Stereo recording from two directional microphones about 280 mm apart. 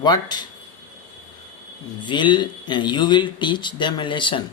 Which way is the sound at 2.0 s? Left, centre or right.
Centre.